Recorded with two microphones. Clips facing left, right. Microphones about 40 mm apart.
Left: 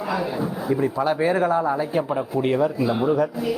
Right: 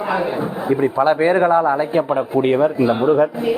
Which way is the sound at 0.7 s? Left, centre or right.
Right.